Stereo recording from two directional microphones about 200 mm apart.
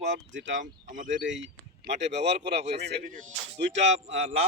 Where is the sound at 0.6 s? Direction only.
40° right (ahead or behind).